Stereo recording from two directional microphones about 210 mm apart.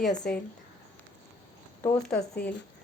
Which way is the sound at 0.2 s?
45° left (ahead or behind).